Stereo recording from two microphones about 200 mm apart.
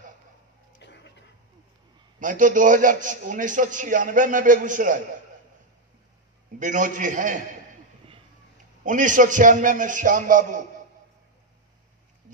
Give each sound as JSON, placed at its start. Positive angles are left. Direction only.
{"t": 0.7, "sound": "a sound", "side_deg": 60}
{"t": 2.1, "sound": "a man's voice", "side_deg": -40}
{"t": 6.6, "sound": "a man's voice", "side_deg": -40}
{"t": 8.8, "sound": "a man's voice", "side_deg": -40}